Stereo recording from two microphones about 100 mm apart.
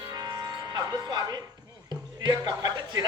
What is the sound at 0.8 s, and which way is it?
Music, 40° right (ahead or behind).